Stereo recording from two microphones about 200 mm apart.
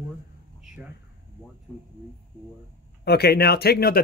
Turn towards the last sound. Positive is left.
turn(degrees=50)  # may be behind; listen again after turning